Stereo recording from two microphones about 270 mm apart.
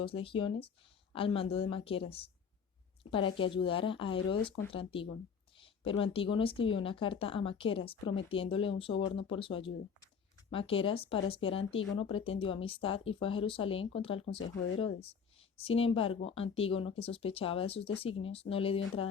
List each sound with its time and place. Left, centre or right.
0.0 s speech: centre
8.9 s speech: left
9.1 s speech: centre
15.5 s speech: left